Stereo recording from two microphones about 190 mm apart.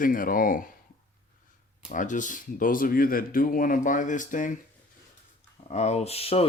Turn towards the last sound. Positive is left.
turn(degrees=30)  # may be behind; listen again after turning